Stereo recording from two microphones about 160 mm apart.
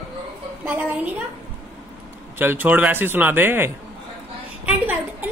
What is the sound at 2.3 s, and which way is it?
Speech, 15° right (ahead or behind).